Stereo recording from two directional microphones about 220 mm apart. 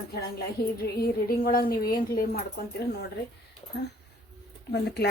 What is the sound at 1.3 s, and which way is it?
A woman's voice, 40° left (ahead or behind).